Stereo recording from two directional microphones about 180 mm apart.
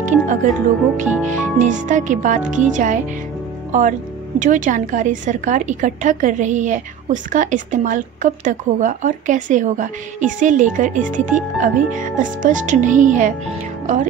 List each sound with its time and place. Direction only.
0.0 s a woman's voice: 45° right (ahead or behind)
4.4 s a woman's voice: 45° right (ahead or behind)